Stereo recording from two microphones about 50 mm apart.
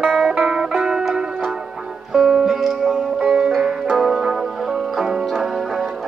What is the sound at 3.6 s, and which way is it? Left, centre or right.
Music, right.